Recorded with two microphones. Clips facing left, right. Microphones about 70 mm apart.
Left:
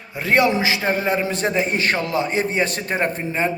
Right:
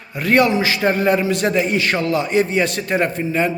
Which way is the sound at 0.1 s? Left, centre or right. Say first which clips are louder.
Right 2 dB; left.